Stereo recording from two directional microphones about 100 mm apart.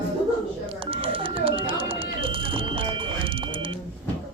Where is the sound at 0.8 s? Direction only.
65° right (ahead or behind).